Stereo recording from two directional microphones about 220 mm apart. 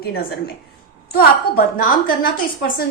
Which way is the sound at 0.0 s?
45° left (ahead or behind).